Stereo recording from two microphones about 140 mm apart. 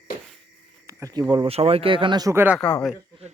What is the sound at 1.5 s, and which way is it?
Speech, 45° right (ahead or behind).